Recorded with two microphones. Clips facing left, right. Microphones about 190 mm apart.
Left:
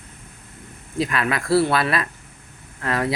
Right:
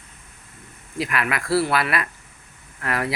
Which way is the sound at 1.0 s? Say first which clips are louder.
Left 2 dB; 25° left (ahead or behind).